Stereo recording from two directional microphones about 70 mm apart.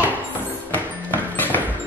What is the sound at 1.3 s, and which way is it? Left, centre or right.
Music, left.